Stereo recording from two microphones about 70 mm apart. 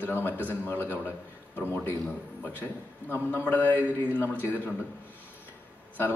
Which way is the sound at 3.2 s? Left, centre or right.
Left.